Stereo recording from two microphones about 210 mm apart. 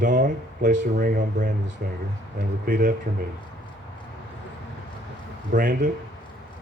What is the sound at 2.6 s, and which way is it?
Speech, 40° right (ahead or behind).